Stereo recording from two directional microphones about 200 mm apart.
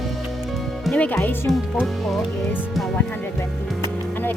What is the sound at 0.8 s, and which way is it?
Speech, 5° left (ahead or behind).